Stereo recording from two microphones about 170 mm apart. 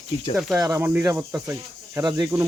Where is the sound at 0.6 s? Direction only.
15° right (ahead or behind).